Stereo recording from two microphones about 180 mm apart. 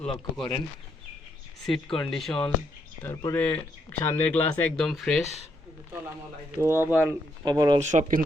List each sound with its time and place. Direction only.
0.0 s speech: 5° left (ahead or behind)
1.6 s speech: centre (ahead or behind)
3.0 s speech: 15° left (ahead or behind)
6.6 s speech: 15° right (ahead or behind)
7.8 s speech: 40° right (ahead or behind)